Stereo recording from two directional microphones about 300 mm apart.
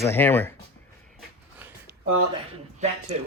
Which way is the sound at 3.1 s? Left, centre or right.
Right.